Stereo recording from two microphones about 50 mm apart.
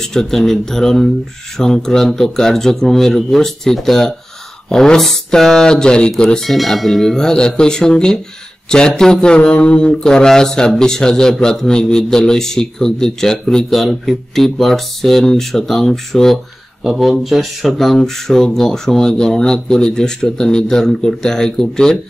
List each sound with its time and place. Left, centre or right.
0.0 s speech: centre
6.5 s speech: centre
16.8 s speech: centre